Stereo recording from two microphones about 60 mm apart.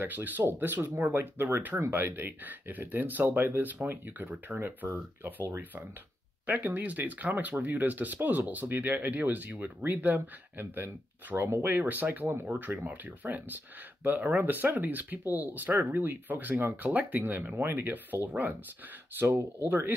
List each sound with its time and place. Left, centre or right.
0.0 s speech: right
6.4 s speech: right